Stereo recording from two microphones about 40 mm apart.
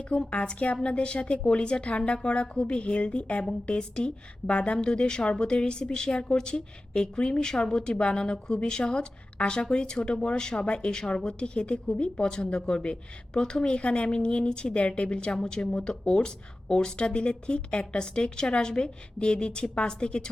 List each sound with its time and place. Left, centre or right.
0.3 s a woman's voice: left